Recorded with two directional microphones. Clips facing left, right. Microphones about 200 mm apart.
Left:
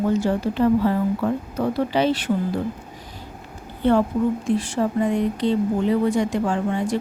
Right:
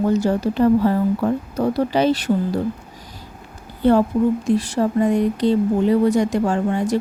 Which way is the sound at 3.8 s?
40° right (ahead or behind).